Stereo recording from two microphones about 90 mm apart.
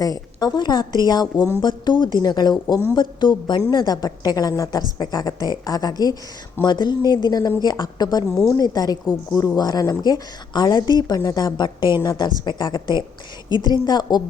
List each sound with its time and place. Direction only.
0.0 s a woman's voice: 45° left (ahead or behind)
1.6 s a woman's voice: 60° left (ahead or behind)